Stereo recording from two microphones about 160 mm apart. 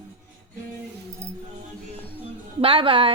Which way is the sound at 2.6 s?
35° right (ahead or behind).